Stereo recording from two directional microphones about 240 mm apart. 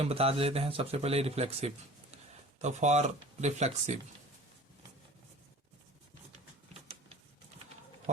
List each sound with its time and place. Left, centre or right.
0.0 s speech: right